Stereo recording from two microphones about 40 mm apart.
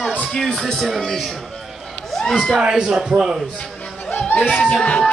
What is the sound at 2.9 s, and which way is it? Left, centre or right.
Speech, centre.